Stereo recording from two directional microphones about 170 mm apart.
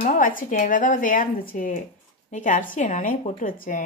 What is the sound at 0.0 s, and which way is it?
Speech, 55° left (ahead or behind).